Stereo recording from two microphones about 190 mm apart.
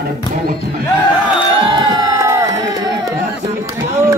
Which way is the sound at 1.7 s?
20° right (ahead or behind).